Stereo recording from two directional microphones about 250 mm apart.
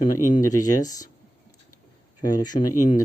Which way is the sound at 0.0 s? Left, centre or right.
Centre.